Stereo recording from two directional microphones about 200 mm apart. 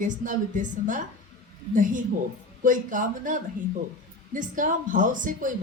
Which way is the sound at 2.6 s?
40° right (ahead or behind).